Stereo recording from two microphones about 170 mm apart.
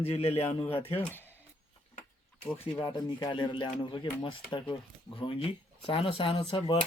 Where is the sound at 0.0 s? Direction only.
35° left (ahead or behind).